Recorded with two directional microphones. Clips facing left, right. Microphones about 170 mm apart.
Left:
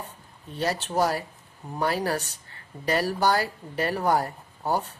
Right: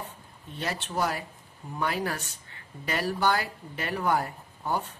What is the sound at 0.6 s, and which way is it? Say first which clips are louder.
A woman's voice: left 5 dB; 40° left (ahead or behind).